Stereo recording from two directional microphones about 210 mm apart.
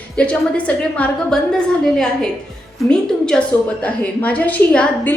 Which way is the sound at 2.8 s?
5° left (ahead or behind).